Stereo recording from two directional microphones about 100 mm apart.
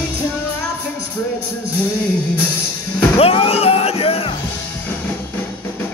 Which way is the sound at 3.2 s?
75° left (ahead or behind).